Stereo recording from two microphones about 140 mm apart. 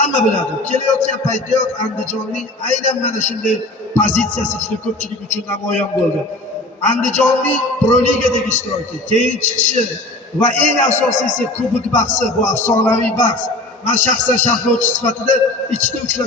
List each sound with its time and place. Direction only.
0.0 s a man's voice: 60° left (ahead or behind)
6.8 s a man's voice: 60° left (ahead or behind)